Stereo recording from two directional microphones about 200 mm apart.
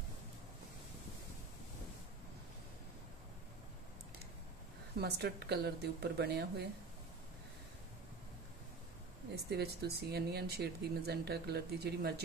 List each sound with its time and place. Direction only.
5.0 s speech: 55° right (ahead or behind)
9.3 s speech: 55° right (ahead or behind)